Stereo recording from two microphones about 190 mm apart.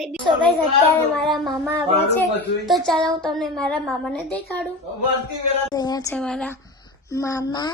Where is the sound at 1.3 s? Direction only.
5° left (ahead or behind).